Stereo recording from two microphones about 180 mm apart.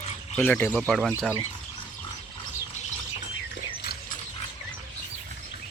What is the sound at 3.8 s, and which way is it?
Dog, 60° left (ahead or behind).